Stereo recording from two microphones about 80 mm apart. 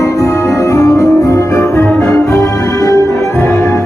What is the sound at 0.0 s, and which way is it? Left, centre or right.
Music, left.